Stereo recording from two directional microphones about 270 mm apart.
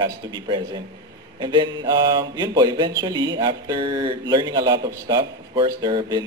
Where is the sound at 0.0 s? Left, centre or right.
Centre.